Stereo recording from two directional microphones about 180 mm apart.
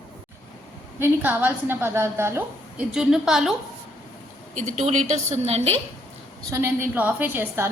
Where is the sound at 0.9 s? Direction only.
10° right (ahead or behind).